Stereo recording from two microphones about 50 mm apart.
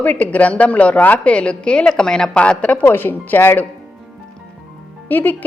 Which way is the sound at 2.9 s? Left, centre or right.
Left.